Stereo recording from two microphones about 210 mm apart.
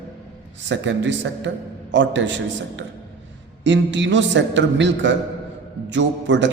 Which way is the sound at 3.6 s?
60° right (ahead or behind).